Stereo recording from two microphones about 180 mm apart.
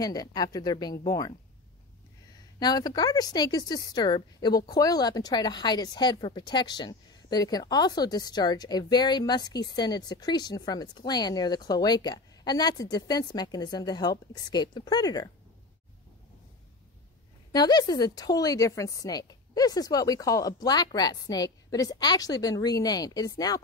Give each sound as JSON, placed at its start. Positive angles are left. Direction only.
{"t": 0.0, "sound": "speech", "side_deg": 20}
{"t": 2.6, "sound": "speech", "side_deg": 20}
{"t": 17.5, "sound": "speech", "side_deg": 20}